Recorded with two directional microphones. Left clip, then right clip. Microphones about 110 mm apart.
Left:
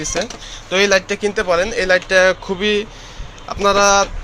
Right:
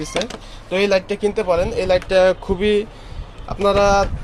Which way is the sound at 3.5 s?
20° right (ahead or behind).